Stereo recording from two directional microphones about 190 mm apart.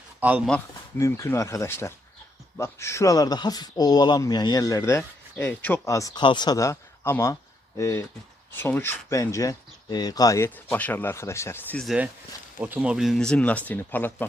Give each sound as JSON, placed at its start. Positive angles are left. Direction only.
{"t": 0.2, "sound": "speech", "side_deg": -5}
{"t": 0.9, "sound": "speech", "side_deg": 15}
{"t": 12.5, "sound": "speech", "side_deg": -5}